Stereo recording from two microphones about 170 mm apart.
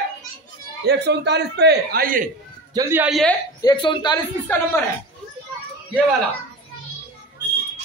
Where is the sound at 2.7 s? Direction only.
15° right (ahead or behind).